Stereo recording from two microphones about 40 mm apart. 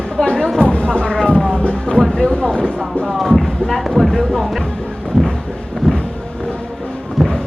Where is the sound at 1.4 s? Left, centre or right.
Centre.